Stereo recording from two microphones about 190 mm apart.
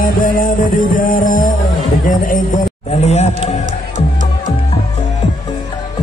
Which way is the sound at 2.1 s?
45° left (ahead or behind).